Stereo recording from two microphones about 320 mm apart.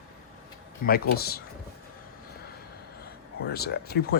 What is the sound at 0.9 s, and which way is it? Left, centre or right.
Speech, left.